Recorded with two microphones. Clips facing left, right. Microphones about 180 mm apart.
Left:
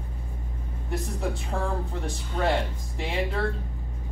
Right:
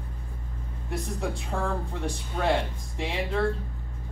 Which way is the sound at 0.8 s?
Centre (ahead or behind).